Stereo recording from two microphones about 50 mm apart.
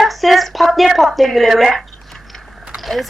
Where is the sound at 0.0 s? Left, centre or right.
Centre.